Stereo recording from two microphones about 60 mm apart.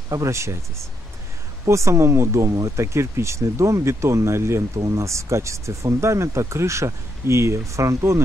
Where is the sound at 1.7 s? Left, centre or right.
Right.